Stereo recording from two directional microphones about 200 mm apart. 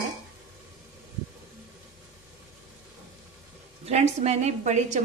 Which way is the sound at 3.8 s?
35° right (ahead or behind).